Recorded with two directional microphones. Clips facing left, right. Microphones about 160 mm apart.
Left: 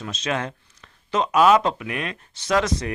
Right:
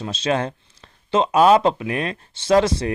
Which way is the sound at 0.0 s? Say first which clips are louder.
Right 5 dB; 30° right (ahead or behind).